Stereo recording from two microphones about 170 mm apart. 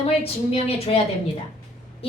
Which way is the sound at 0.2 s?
35° left (ahead or behind).